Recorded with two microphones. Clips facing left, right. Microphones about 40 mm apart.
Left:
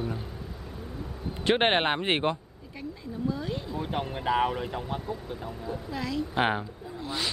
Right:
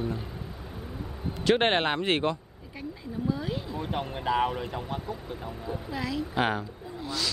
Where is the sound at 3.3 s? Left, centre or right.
Centre.